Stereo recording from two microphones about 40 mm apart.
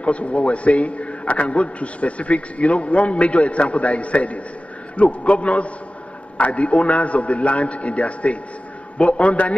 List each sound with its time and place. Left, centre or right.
0.0 s a man's voice: left